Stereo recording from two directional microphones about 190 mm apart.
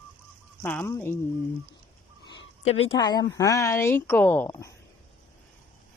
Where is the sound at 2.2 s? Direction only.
30° left (ahead or behind).